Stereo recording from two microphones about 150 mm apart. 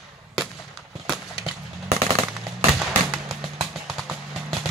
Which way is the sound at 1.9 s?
45° right (ahead or behind).